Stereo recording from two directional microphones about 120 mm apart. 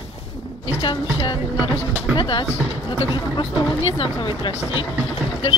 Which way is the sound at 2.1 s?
45° left (ahead or behind).